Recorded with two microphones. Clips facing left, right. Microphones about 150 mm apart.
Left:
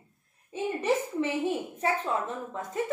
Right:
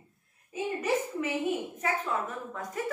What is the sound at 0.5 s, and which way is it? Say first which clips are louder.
A woman's voice: left 2 dB; 30° left (ahead or behind).